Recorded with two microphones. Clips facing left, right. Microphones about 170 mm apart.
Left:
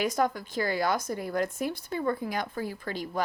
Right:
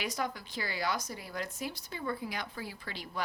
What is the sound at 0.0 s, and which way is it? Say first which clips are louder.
Speech: left 9 dB; 50° left (ahead or behind).